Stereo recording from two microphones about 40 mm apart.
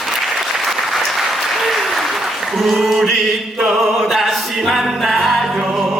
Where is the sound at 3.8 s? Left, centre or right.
Centre.